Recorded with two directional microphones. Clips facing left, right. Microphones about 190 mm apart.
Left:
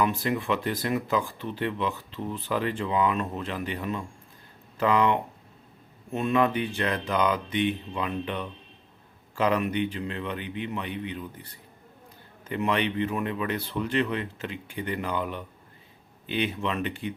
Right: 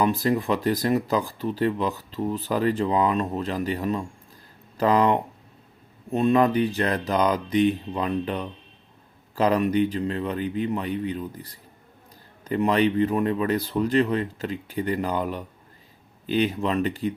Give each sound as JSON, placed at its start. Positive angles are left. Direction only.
{"t": 0.0, "sound": "speech", "side_deg": -35}